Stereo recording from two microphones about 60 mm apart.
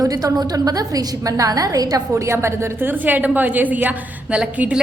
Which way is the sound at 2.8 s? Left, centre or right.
Right.